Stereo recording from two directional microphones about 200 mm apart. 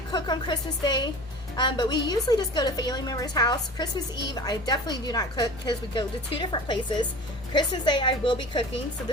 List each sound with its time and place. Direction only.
0.1 s a woman's voice: 20° left (ahead or behind)